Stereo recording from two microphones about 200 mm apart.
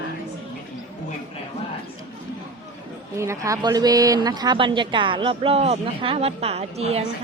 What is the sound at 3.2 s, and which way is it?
Speech, 15° right (ahead or behind).